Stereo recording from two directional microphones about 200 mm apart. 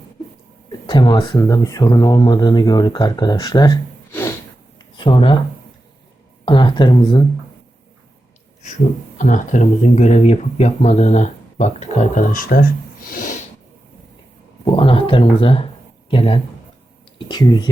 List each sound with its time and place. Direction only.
0.9 s speech: 20° left (ahead or behind)
4.1 s snort: 10° left (ahead or behind)
4.8 s a sound: 25° left (ahead or behind)
6.4 s speech: 25° left (ahead or behind)
9.1 s speech: 40° left (ahead or behind)
13.1 s snort: 45° left (ahead or behind)
14.6 s speech: 25° left (ahead or behind)